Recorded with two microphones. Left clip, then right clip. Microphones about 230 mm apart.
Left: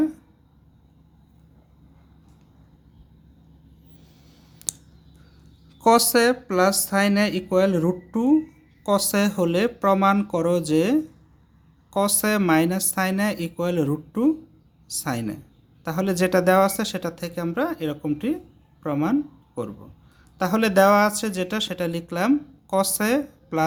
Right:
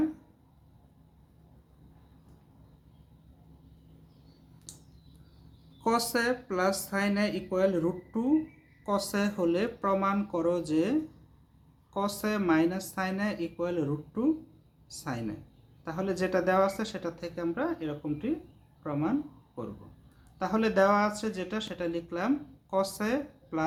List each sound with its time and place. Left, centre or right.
5.8 s speech: left